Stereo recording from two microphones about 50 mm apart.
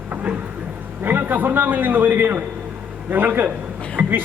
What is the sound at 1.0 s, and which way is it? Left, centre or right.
A man's voice, right.